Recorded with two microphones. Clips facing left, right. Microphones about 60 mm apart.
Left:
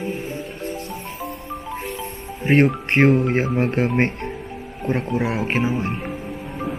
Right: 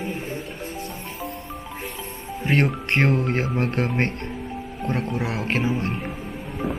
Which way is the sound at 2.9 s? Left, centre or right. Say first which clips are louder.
Left 5 dB; left.